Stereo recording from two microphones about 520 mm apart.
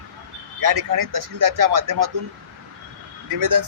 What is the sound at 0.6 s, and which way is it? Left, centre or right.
A man's voice, right.